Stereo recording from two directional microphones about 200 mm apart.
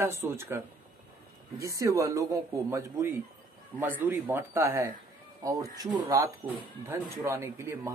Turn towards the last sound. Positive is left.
turn(degrees=-15)  # may be behind; listen again after turning